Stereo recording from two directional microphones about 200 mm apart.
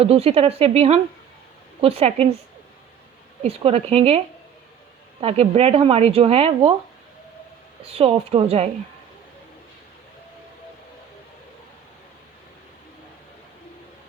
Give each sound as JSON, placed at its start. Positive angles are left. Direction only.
{"t": 0.0, "sound": "speech", "side_deg": -30}
{"t": 3.4, "sound": "speech", "side_deg": -30}
{"t": 5.2, "sound": "speech", "side_deg": -30}
{"t": 7.9, "sound": "speech", "side_deg": -30}